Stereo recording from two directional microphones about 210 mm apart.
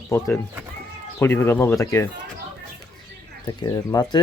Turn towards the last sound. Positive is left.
turn(degrees=20)  # may be behind; listen again after turning